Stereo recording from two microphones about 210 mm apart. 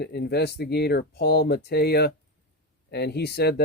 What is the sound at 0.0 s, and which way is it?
Speech, 50° left (ahead or behind).